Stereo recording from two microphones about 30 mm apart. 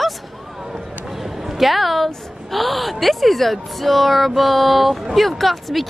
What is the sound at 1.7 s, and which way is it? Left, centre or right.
A woman's voice, centre.